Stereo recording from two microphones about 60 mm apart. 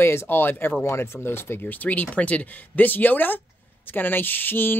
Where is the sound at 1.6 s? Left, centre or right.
Left.